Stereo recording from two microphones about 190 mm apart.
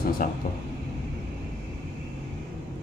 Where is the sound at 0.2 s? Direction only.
45° left (ahead or behind).